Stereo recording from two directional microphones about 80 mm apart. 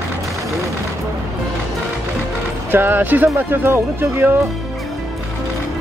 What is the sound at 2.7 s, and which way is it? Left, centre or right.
Speech, right.